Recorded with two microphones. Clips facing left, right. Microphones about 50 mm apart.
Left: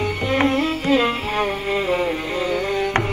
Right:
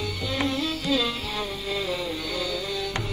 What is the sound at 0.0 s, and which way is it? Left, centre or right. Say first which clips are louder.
Music: left 8 dB; left.